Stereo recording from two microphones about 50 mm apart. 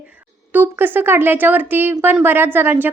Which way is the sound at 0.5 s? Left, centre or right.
Right.